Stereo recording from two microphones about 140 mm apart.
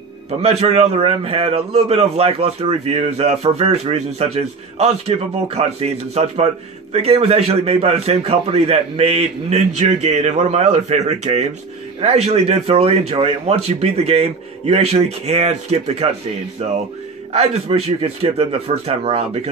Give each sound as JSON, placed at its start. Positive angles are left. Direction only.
{"t": 0.4, "sound": "a man's voice", "side_deg": -45}
{"t": 17.3, "sound": "a man's voice", "side_deg": -50}